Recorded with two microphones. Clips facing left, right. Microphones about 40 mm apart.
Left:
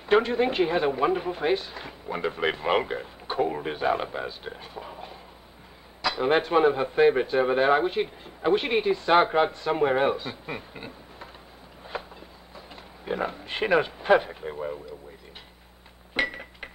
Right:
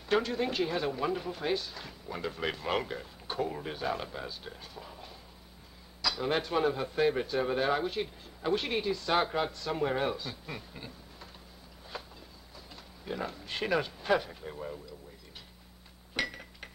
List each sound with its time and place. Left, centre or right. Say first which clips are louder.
0.0 s speech: left 8 dB; left
11.9 s train: left 8 dB; left
12.5 s speech: left 6 dB; left
16.2 s chink: left 7 dB; left